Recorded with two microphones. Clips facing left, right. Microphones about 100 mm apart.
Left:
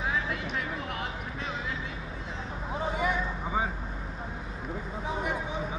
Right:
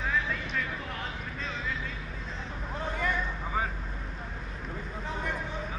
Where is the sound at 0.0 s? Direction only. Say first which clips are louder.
Even; 10° left (ahead or behind).